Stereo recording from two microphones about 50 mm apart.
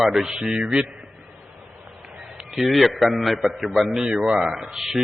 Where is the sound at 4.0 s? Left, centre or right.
Centre.